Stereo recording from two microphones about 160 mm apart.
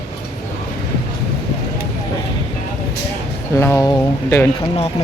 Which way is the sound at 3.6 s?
20° left (ahead or behind).